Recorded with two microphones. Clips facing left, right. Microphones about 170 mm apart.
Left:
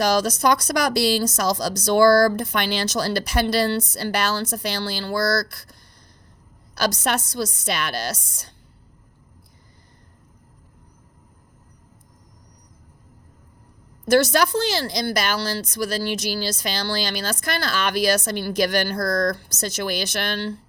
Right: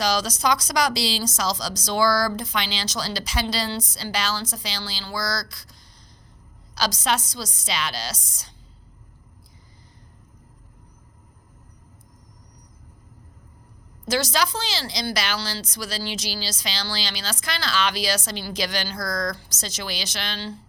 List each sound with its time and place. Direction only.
0.0 s speech: 55° left (ahead or behind)
6.7 s speech: 60° left (ahead or behind)
14.1 s speech: 60° left (ahead or behind)